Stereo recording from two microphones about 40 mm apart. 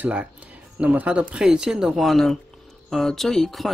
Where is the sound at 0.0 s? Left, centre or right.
Right.